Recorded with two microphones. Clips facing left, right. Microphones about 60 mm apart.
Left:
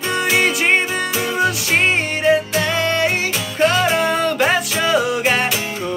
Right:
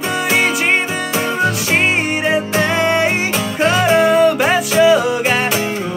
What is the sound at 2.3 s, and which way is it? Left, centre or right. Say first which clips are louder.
Music: left 2 dB; right.